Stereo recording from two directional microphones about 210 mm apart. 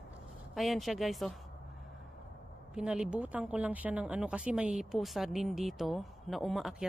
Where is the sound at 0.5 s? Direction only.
Centre (ahead or behind).